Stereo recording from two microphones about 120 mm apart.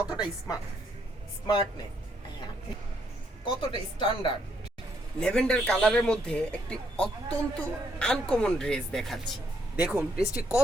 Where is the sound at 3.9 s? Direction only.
40° left (ahead or behind).